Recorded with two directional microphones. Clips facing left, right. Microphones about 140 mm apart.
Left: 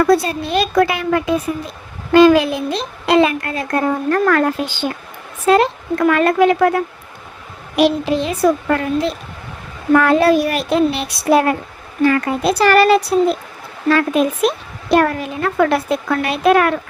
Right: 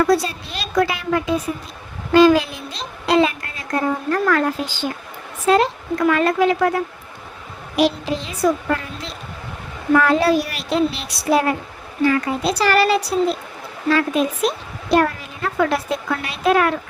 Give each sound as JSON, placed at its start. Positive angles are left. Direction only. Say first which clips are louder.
{"t": 0.1, "sound": "a woman's voice", "louder": "left 4 dB", "side_deg": 55}